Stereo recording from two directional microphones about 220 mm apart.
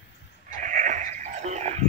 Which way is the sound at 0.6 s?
35° right (ahead or behind).